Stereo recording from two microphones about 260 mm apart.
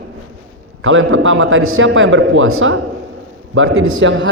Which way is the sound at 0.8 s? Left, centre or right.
Right.